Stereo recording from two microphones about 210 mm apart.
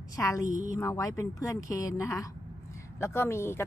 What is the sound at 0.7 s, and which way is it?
A woman's voice, 15° left (ahead or behind).